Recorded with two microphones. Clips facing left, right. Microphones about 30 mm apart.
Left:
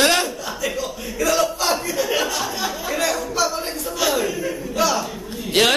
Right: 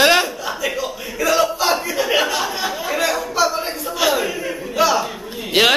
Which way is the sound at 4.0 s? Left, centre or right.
Centre.